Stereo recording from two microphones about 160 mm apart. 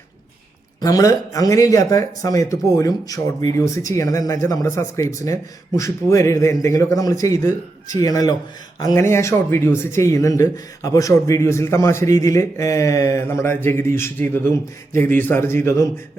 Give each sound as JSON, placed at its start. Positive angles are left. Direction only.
{"t": 0.8, "sound": "speech", "side_deg": 25}